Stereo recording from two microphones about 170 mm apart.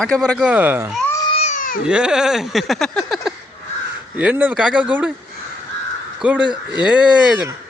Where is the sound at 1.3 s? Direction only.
45° left (ahead or behind).